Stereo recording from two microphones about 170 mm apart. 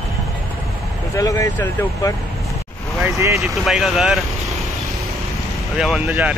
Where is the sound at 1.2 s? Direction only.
20° left (ahead or behind).